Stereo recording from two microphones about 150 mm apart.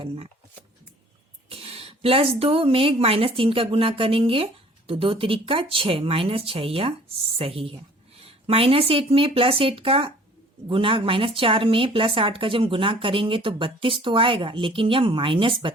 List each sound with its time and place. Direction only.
1.5 s a woman's voice: 40° right (ahead or behind)